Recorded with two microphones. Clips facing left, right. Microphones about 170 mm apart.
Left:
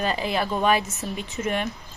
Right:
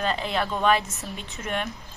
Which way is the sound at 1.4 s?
5° left (ahead or behind).